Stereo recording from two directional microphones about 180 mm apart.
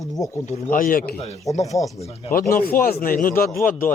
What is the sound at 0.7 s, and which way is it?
Speech, 50° left (ahead or behind).